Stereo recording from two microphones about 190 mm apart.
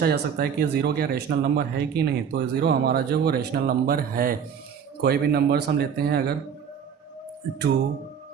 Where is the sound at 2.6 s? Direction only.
55° right (ahead or behind).